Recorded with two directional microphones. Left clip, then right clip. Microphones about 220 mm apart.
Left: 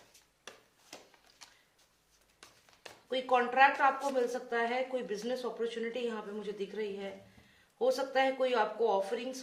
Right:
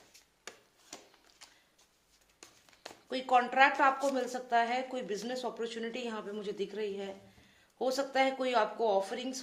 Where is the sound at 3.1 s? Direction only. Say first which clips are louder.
Right 1 dB; 40° right (ahead or behind).